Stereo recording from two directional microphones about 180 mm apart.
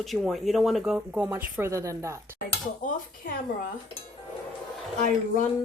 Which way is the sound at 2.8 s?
50° left (ahead or behind).